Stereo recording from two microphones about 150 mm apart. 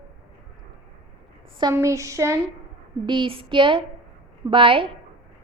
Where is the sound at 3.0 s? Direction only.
35° right (ahead or behind).